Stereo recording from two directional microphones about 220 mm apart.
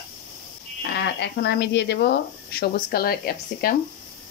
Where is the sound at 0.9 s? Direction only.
50° left (ahead or behind).